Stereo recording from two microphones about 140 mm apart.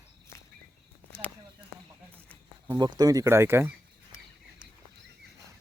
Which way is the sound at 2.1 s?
10° left (ahead or behind).